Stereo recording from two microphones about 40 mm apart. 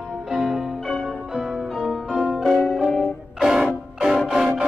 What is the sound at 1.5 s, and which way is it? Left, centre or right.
Music, centre.